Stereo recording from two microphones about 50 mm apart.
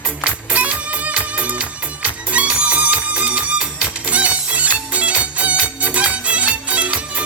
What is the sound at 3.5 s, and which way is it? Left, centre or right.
Music, centre.